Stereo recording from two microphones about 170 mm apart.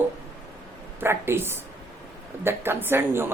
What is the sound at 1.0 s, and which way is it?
Speech, 15° right (ahead or behind).